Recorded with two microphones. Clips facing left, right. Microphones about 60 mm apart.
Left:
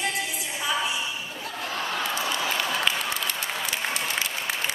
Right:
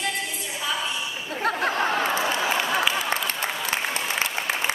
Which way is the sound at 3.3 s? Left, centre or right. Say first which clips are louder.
Right 2 dB; right.